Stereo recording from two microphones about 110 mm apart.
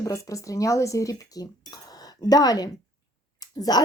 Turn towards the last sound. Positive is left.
turn(degrees=35)  # may be behind; listen again after turning